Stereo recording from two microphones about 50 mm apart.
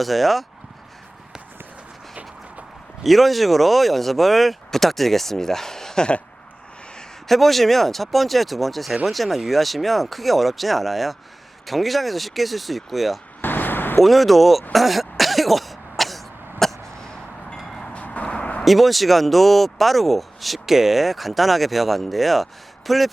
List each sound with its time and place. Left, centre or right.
0.0 s speech: centre
3.0 s speech: centre
7.3 s speech: centre
13.4 s vehicle: left
14.0 s speech: centre
14.7 s throat clearing: centre
17.7 s vehicle: centre
18.0 s a sound: left
18.6 s speech: centre